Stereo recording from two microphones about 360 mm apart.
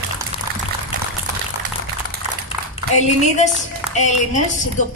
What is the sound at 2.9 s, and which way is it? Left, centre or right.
A woman's voice, centre.